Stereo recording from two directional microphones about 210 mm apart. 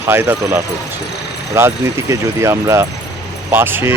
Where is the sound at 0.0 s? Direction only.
10° right (ahead or behind).